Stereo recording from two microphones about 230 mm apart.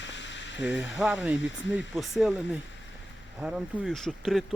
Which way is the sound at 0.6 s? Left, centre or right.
Centre.